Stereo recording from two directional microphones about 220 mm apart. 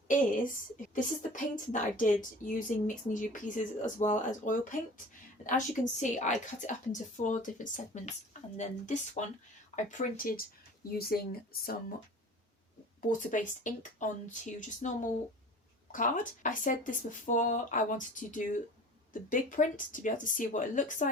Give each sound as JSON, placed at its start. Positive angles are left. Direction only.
{"t": 0.9, "sound": "a woman's voice", "side_deg": 35}
{"t": 13.0, "sound": "a woman's voice", "side_deg": 35}